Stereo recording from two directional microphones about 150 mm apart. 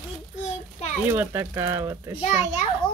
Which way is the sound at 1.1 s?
15° right (ahead or behind).